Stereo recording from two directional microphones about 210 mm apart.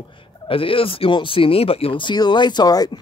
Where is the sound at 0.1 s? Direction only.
25° left (ahead or behind).